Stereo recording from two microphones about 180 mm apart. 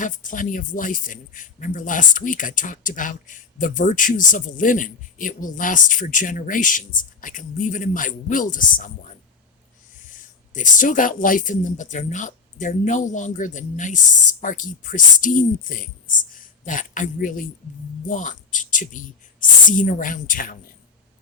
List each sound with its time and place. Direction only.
0.0 s speech: 45° left (ahead or behind)
10.1 s speech: 45° left (ahead or behind)